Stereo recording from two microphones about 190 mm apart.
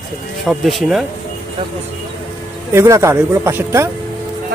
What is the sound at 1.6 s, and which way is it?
Speech, 25° right (ahead or behind).